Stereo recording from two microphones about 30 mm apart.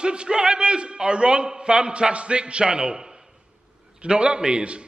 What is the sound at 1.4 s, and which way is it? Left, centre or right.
Speech, right.